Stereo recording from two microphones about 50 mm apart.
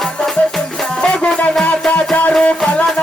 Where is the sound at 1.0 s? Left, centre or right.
Centre.